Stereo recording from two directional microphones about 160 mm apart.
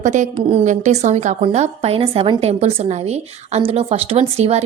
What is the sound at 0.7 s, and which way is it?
A woman's voice, 50° right (ahead or behind).